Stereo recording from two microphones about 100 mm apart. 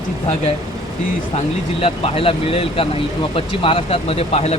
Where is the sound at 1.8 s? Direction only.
70° left (ahead or behind); by 4.5 s 90° left.